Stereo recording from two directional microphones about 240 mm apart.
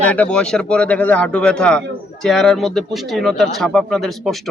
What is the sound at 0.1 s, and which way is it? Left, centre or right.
Speech, centre.